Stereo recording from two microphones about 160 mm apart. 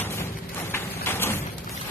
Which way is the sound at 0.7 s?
15° left (ahead or behind).